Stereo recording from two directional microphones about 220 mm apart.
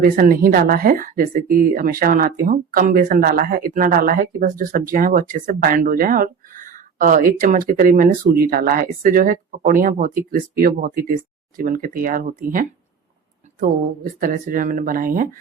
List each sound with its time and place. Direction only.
0.0 s speech: 40° right (ahead or behind)